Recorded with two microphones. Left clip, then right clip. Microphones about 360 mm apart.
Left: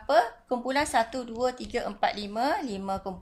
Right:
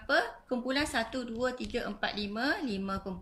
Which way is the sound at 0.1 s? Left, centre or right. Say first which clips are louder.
Left 6 dB; centre.